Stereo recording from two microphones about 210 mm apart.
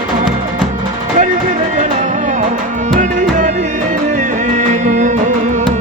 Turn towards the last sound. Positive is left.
turn(degrees=-35)  # may be behind; listen again after turning